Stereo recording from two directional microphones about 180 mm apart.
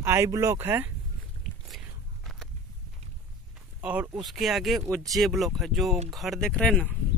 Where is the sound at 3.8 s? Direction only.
5° right (ahead or behind).